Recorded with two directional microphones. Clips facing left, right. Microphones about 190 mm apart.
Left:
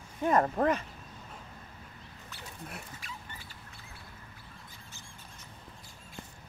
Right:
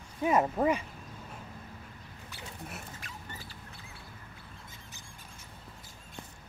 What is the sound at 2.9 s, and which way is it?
Rodents, 50° right (ahead or behind).